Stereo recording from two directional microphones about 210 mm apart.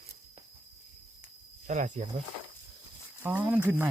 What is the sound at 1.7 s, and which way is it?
Speech, 35° right (ahead or behind).